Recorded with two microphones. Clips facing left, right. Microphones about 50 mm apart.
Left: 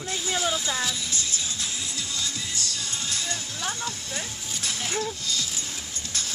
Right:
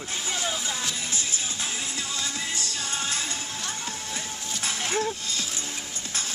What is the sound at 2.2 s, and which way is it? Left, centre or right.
Music, right.